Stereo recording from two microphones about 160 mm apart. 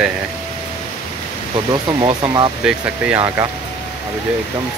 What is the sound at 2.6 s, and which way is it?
Speech, 5° right (ahead or behind).